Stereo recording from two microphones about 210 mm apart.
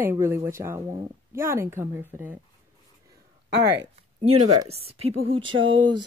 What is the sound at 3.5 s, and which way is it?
Speech, 55° right (ahead or behind).